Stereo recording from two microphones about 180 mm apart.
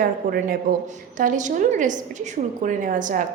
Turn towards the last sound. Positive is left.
turn(degrees=-45)  # may be behind; listen again after turning